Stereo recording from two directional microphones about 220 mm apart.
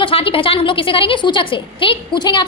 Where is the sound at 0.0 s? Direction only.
25° left (ahead or behind).